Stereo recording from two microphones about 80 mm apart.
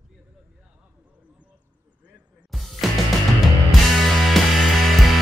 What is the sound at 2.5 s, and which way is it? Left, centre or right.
Music, centre.